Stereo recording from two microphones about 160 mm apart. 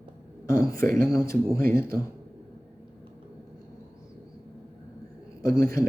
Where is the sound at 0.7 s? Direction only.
65° right (ahead or behind).